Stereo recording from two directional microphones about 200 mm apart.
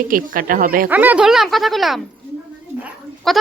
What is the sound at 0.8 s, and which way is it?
Speech, 10° right (ahead or behind).